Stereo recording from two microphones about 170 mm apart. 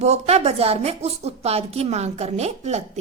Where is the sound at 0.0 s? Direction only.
40° right (ahead or behind).